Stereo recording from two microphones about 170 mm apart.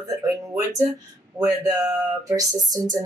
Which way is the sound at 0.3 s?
20° right (ahead or behind).